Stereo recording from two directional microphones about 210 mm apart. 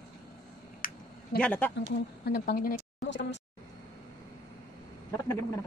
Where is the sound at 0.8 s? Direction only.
40° left (ahead or behind).